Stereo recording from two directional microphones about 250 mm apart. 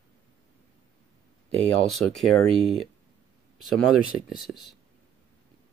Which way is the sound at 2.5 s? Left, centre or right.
Right.